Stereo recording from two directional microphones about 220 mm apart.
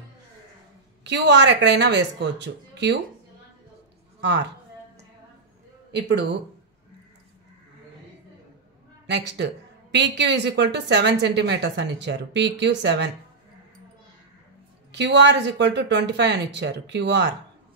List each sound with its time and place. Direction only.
1.0 s a woman's voice: 50° right (ahead or behind)
5.9 s speech: 50° right (ahead or behind)
9.0 s a woman's voice: 50° right (ahead or behind)
14.9 s a woman's voice: 50° right (ahead or behind)